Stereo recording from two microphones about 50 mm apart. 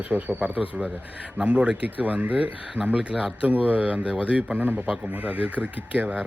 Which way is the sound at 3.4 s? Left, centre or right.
Right.